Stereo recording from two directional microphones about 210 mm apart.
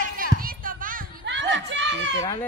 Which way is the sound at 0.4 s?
45° right (ahead or behind).